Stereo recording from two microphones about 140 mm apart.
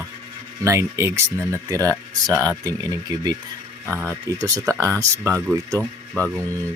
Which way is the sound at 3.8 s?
15° right (ahead or behind).